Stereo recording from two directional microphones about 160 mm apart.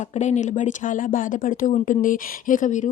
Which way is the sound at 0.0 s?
45° left (ahead or behind).